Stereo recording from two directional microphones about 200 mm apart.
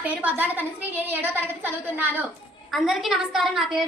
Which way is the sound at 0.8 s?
10° right (ahead or behind).